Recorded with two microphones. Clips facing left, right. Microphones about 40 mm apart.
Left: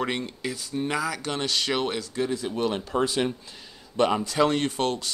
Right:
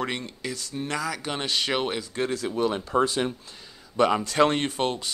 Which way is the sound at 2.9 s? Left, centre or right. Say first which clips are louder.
Right 1 dB; centre.